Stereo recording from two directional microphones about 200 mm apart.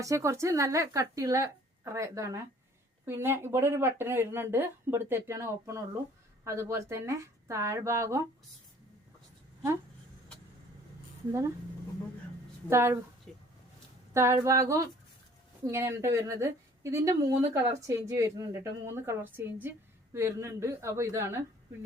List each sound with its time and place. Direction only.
0.0 s speech: 15° right (ahead or behind)
12.6 s speech: 10° right (ahead or behind)
13.3 s a sound: centre (ahead or behind)
14.1 s speech: 15° right (ahead or behind)